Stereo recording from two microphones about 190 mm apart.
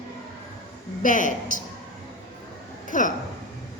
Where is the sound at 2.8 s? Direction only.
45° left (ahead or behind).